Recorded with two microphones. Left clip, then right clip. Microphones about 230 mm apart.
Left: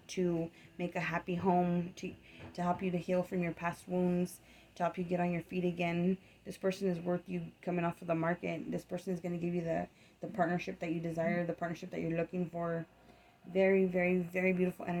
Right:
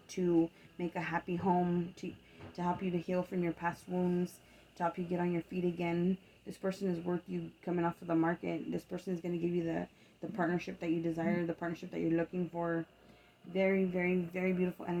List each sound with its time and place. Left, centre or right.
0.8 s speech: left
4.8 s speech: left